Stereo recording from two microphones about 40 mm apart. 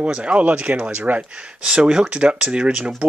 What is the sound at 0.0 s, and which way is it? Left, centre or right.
Speech, right.